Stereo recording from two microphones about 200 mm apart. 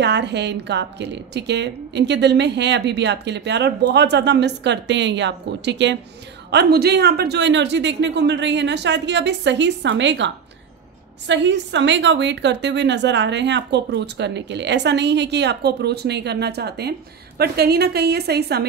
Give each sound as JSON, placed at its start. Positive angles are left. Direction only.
{"t": 0.0, "sound": "a woman's voice", "side_deg": -60}